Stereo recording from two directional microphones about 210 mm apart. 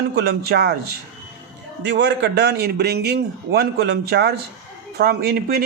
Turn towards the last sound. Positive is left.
turn(degrees=-50)  # may be behind; listen again after turning